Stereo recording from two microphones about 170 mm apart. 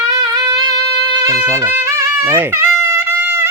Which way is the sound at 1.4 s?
15° right (ahead or behind).